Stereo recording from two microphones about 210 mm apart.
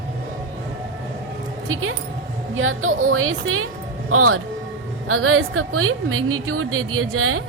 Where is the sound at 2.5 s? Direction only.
70° right (ahead or behind).